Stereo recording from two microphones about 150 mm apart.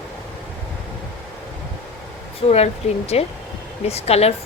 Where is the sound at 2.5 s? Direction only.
45° left (ahead or behind).